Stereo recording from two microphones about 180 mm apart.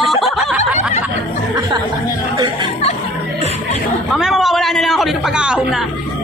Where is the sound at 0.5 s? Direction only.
10° right (ahead or behind).